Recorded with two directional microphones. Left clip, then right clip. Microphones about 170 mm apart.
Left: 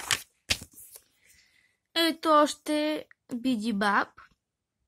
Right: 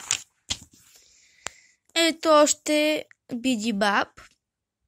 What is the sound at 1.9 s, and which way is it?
Speech, 20° right (ahead or behind).